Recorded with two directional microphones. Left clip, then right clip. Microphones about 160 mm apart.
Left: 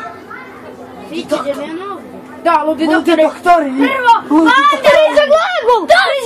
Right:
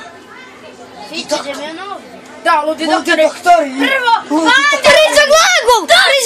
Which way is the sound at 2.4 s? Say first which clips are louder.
Left 1 dB; 40° right (ahead or behind).